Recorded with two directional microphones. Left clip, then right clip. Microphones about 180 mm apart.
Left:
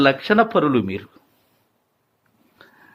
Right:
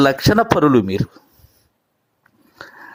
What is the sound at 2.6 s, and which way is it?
Dog, 50° right (ahead or behind).